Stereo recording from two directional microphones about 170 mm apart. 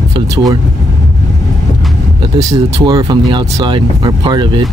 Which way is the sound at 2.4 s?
25° right (ahead or behind).